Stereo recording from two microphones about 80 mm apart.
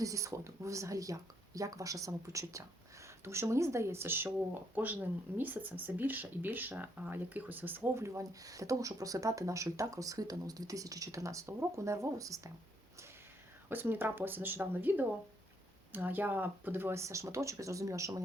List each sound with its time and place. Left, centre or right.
0.0 s speech: right
8.0 s speech: right
13.7 s speech: right